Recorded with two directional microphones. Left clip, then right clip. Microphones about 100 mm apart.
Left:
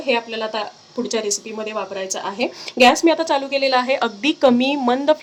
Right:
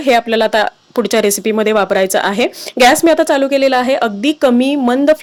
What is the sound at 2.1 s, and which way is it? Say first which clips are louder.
Speech: right 10 dB; 55° right (ahead or behind).